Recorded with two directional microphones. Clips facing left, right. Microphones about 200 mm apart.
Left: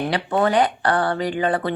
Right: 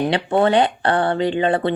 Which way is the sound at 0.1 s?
25° right (ahead or behind).